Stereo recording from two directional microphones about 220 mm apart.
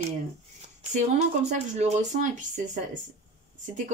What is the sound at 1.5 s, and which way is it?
Speech, 30° right (ahead or behind).